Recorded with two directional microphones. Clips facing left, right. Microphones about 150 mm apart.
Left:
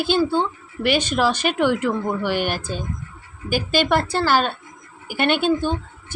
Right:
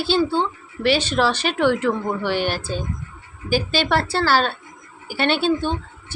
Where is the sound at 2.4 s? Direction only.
50° left (ahead or behind).